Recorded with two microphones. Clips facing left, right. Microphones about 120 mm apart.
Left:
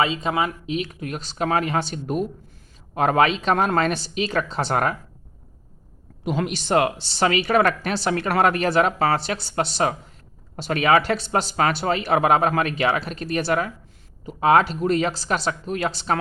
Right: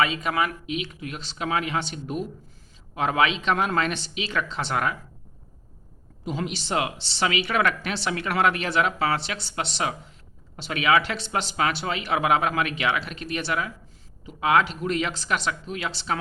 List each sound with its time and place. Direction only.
0.0 s speech: 25° left (ahead or behind); by 4.9 s 45° left (ahead or behind)
6.2 s speech: 65° left (ahead or behind); by 16.1 s 45° left (ahead or behind)